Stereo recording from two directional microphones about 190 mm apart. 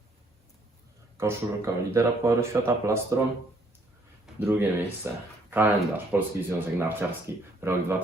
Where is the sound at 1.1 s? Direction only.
15° right (ahead or behind).